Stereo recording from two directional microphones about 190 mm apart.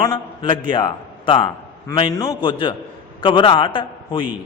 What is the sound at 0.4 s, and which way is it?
A man's voice, 25° left (ahead or behind).